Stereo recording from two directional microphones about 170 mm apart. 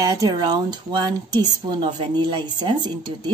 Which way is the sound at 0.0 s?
20° right (ahead or behind).